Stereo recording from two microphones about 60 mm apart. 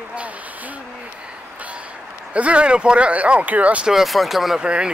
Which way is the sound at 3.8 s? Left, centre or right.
Centre.